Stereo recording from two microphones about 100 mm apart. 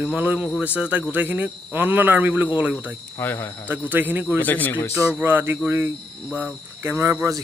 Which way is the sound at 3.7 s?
20° right (ahead or behind).